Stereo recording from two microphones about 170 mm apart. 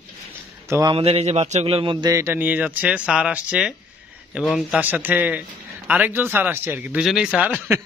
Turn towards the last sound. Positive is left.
turn(degrees=-10)  # may be behind; listen again after turning